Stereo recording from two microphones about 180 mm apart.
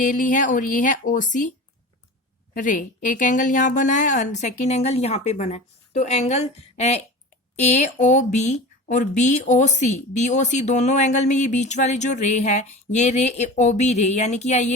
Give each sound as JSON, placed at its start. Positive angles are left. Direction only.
{"t": 0.0, "sound": "speech", "side_deg": 45}
{"t": 2.6, "sound": "speech", "side_deg": 45}